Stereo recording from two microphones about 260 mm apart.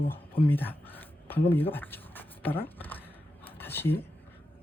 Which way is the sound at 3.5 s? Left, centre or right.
Centre.